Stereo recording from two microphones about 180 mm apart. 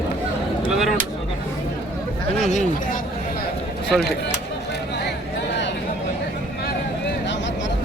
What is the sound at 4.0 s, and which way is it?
Speech, 60° left (ahead or behind).